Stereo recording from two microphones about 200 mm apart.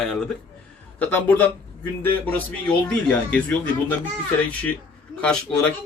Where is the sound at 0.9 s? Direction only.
10° left (ahead or behind).